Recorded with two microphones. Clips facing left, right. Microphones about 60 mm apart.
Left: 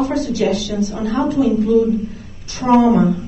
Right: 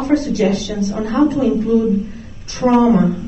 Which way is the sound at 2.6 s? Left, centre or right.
Right.